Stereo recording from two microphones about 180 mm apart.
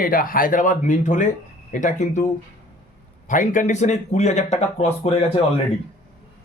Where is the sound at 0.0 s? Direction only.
50° left (ahead or behind).